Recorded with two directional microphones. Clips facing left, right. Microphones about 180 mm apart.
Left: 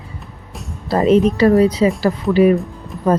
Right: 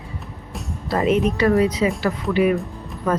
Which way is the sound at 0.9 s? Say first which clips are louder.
Left 6 dB; 35° left (ahead or behind).